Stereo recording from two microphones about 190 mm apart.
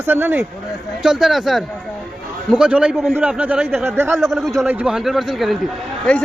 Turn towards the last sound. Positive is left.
turn(degrees=5)  # may be behind; listen again after turning